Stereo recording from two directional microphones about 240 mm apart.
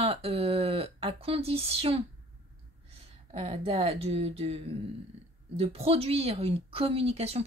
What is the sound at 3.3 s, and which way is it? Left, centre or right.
Speech, right.